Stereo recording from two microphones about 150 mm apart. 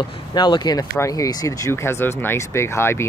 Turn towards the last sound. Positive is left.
turn(degrees=15)  # may be behind; listen again after turning